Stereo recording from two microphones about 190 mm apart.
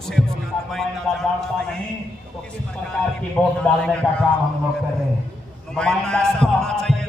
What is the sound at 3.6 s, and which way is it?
Speech, 5° left (ahead or behind).